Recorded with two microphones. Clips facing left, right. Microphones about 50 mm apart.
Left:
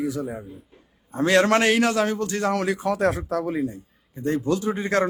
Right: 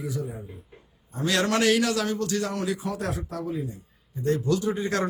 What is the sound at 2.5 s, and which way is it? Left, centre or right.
Speech, left.